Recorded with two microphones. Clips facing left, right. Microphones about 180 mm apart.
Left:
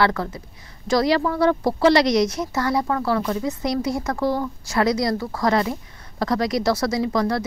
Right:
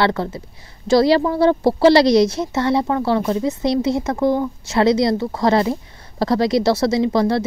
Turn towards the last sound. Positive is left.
turn(degrees=-25)  # may be behind; listen again after turning